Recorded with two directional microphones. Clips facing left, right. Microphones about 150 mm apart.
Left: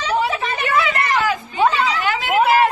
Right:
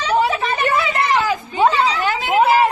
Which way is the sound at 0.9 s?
25° right (ahead or behind).